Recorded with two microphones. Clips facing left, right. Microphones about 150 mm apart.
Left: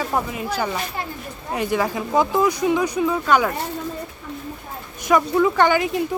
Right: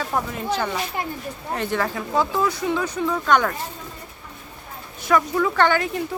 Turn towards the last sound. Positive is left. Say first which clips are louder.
# left 3 dB
turn(degrees=15)  # may be behind; listen again after turning